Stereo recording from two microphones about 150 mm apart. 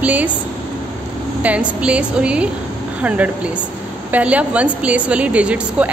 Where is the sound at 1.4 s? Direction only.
10° right (ahead or behind).